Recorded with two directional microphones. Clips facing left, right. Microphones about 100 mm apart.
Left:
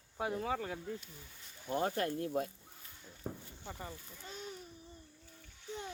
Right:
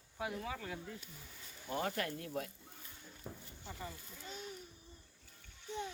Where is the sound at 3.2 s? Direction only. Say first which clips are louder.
Left 6 dB; 45° left (ahead or behind).